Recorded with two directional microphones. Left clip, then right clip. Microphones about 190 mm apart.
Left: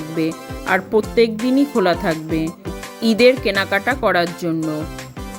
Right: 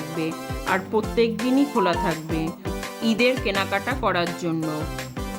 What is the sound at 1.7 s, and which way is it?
Speech, 20° left (ahead or behind).